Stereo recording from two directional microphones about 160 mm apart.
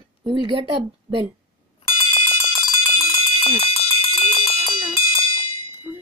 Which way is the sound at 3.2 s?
35° left (ahead or behind).